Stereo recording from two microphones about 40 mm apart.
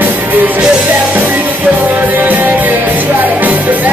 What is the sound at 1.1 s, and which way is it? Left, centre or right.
Music, right.